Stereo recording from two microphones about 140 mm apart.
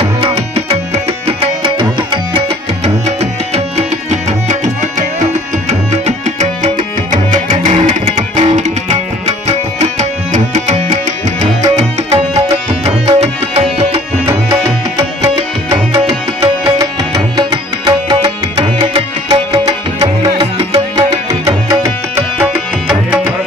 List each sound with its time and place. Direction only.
0.0 s tabla: 45° right (ahead or behind)
1.2 s music: 40° right (ahead or behind)
2.3 s tabla: 50° right (ahead or behind)
6.0 s music: 55° right (ahead or behind)
12.1 s music: 45° right (ahead or behind)
15.7 s music: 25° right (ahead or behind); by 19.4 s 40° right (ahead or behind)
19.5 s music: 25° right (ahead or behind); by 23.3 s 10° right (ahead or behind)